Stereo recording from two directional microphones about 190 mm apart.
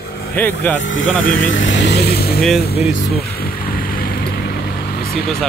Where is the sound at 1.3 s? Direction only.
85° left; by 2.4 s 55° left (ahead or behind).